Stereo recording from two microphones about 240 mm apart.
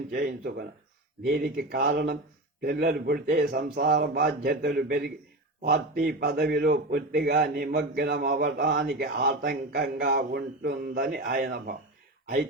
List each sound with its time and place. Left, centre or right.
0.1 s a man's voice: right